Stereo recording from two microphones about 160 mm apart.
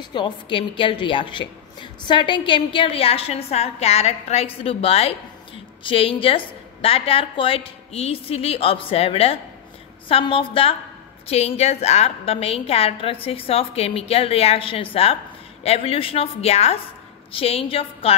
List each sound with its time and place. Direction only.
0.0 s a woman's voice: 30° left (ahead or behind)